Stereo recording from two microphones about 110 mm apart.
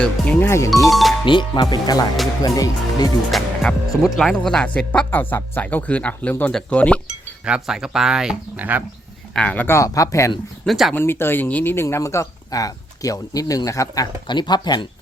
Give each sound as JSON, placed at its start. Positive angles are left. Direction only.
{"t": 0.0, "sound": "speech", "side_deg": 15}
{"t": 0.9, "sound": "speech", "side_deg": 0}
{"t": 1.2, "sound": "speech", "side_deg": 45}
{"t": 3.3, "sound": "speech", "side_deg": 5}
{"t": 7.4, "sound": "speech", "side_deg": -5}
{"t": 9.3, "sound": "speech", "side_deg": 10}
{"t": 9.7, "sound": "speech", "side_deg": 30}
{"t": 10.7, "sound": "speech", "side_deg": 0}
{"t": 10.9, "sound": "speech", "side_deg": 20}